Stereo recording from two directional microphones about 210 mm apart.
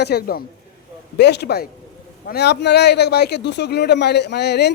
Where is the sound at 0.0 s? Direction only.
50° left (ahead or behind).